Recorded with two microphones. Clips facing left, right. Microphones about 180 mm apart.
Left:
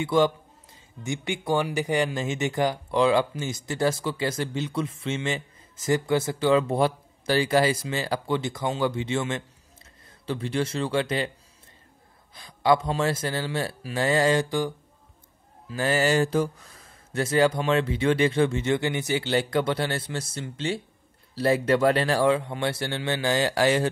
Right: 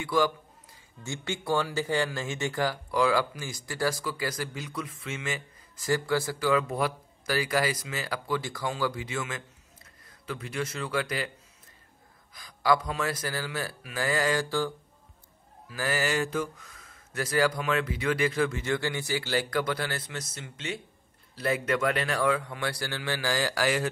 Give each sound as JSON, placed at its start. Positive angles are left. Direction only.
{"t": 0.0, "sound": "speech", "side_deg": 25}
{"t": 12.4, "sound": "speech", "side_deg": 25}
{"t": 15.7, "sound": "speech", "side_deg": 25}